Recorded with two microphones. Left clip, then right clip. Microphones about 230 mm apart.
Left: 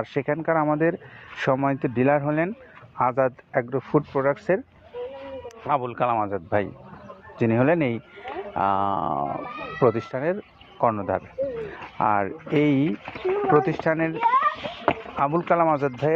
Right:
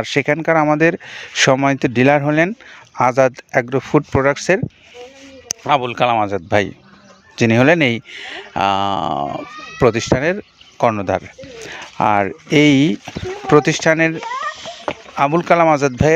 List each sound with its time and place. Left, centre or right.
0.0 s speech: right
5.7 s speech: right
15.1 s speech: right